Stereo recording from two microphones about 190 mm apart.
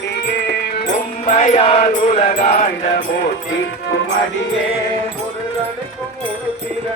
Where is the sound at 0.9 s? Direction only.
35° left (ahead or behind).